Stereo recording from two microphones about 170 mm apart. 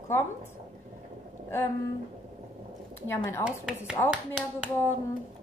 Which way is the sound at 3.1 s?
15° left (ahead or behind).